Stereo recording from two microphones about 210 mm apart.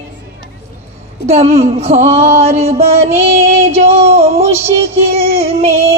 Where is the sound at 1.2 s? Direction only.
30° right (ahead or behind).